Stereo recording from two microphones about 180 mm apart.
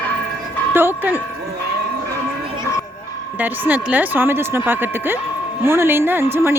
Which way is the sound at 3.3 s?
10° right (ahead or behind).